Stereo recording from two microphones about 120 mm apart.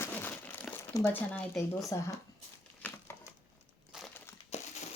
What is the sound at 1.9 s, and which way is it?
Speech, 25° left (ahead or behind).